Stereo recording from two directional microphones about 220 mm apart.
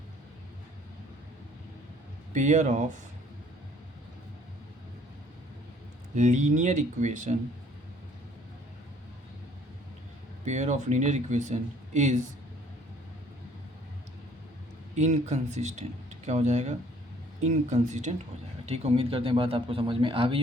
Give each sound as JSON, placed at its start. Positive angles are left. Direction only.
{"t": 2.3, "sound": "speech", "side_deg": -35}
{"t": 6.1, "sound": "speech", "side_deg": -30}
{"t": 10.4, "sound": "speech", "side_deg": -30}
{"t": 14.9, "sound": "speech", "side_deg": -30}